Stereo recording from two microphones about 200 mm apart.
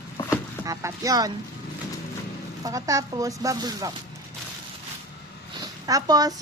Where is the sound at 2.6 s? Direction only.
15° right (ahead or behind).